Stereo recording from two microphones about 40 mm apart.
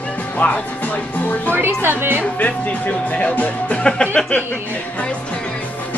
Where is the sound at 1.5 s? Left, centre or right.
Right.